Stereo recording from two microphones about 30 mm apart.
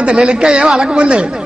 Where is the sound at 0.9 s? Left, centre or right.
Right.